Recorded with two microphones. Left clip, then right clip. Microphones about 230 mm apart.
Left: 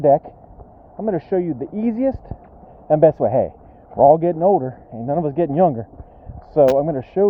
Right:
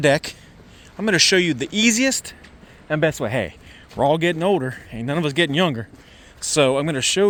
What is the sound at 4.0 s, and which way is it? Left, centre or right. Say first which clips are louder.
Speech: left 6 dB; centre.